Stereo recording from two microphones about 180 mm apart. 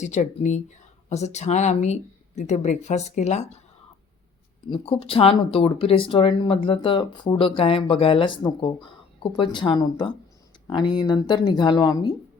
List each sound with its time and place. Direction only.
0.0 s speech: 40° left (ahead or behind)
4.7 s speech: 30° left (ahead or behind)